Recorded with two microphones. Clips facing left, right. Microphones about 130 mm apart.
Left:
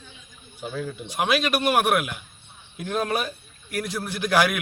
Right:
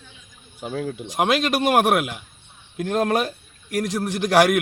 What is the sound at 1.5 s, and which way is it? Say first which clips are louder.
A man's voice: right 4 dB; 90° right.